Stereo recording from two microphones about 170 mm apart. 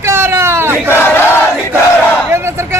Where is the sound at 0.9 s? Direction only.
15° left (ahead or behind).